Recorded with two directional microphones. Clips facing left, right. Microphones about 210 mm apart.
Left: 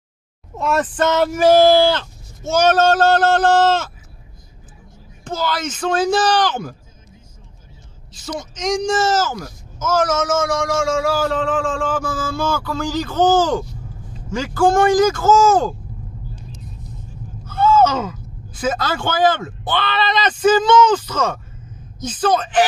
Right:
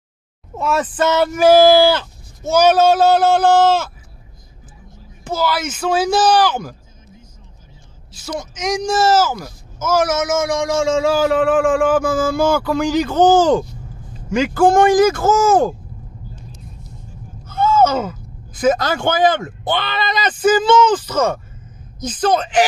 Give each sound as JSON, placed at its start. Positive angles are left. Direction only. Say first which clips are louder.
{"t": 0.6, "sound": "speech", "louder": "even", "side_deg": 0}
{"t": 5.2, "sound": "speech", "louder": "right 3 dB", "side_deg": -5}
{"t": 8.3, "sound": "speech", "louder": "even", "side_deg": -5}
{"t": 17.5, "sound": "a sound", "louder": "even", "side_deg": -15}
{"t": 18.6, "sound": "speech", "louder": "right 5 dB", "side_deg": -15}